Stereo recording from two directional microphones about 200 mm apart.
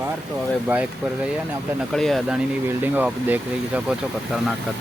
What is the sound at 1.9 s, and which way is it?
Speech, centre (ahead or behind).